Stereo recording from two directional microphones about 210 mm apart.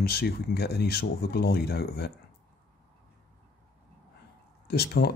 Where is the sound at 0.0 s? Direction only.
50° left (ahead or behind).